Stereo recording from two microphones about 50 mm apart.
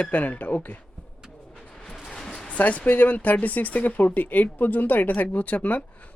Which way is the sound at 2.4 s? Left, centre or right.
Left.